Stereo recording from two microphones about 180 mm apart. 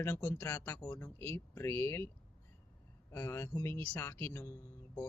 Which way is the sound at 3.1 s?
15° left (ahead or behind).